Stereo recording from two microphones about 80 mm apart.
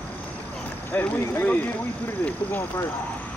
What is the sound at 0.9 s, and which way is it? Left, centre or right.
Speech, left.